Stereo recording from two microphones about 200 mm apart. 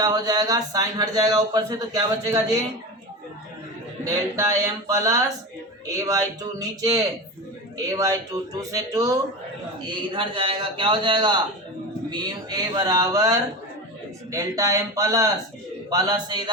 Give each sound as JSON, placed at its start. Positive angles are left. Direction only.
{"t": 0.0, "sound": "speech", "side_deg": -20}
{"t": 4.0, "sound": "speech", "side_deg": -15}